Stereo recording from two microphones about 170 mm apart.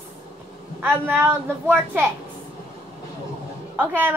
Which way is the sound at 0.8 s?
10° right (ahead or behind).